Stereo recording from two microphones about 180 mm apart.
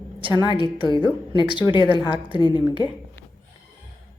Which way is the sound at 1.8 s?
25° right (ahead or behind).